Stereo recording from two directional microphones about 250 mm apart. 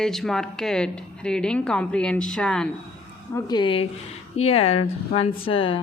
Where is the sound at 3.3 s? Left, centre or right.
Centre.